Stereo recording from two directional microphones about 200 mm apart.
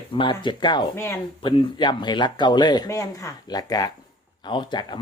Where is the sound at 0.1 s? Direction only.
25° left (ahead or behind).